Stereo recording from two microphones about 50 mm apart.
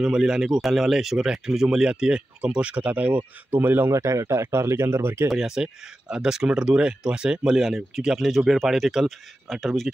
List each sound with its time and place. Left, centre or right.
0.0 s speech: centre; by 3.9 s right
3.9 s speech: right
5.3 s speech: centre
7.5 s speech: centre